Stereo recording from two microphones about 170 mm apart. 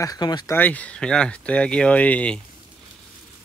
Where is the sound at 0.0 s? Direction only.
25° left (ahead or behind).